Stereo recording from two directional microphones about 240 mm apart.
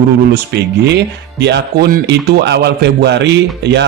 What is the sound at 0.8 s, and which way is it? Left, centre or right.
A man's voice, right.